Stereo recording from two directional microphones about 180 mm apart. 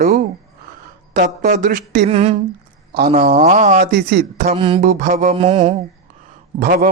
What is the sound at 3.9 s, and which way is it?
Speech, 65° right (ahead or behind).